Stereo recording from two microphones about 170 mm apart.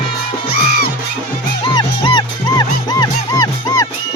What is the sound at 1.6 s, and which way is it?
Music, 25° left (ahead or behind).